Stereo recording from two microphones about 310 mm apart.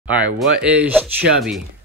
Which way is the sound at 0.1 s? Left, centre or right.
Centre.